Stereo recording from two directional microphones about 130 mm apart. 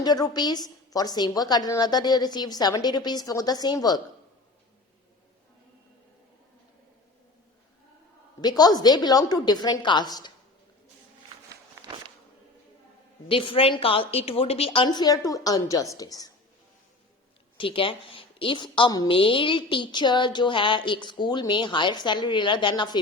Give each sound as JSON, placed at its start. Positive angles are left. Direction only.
{"t": 0.0, "sound": "a woman's voice", "side_deg": 30}
{"t": 8.4, "sound": "a woman's voice", "side_deg": 30}
{"t": 11.8, "sound": "walk", "side_deg": -25}
{"t": 13.2, "sound": "a woman's voice", "side_deg": 45}
{"t": 14.8, "sound": "a woman's voice", "side_deg": 30}
{"t": 17.6, "sound": "a woman's voice", "side_deg": 40}